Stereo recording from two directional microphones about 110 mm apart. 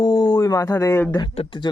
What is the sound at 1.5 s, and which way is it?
Speech, 45° left (ahead or behind).